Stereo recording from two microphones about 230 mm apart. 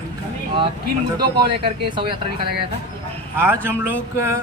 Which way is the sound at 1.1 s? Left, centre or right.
Centre.